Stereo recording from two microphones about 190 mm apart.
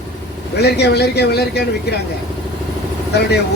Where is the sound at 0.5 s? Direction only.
60° left (ahead or behind).